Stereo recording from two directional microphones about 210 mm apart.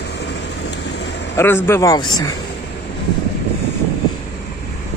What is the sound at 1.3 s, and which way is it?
A man's voice, 10° left (ahead or behind).